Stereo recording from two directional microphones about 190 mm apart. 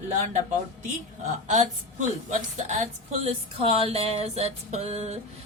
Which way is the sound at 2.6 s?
40° right (ahead or behind).